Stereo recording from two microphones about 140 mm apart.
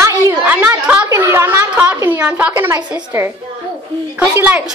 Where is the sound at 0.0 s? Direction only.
15° right (ahead or behind).